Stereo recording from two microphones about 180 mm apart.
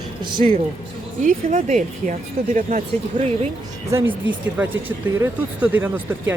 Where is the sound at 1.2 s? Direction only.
45° right (ahead or behind).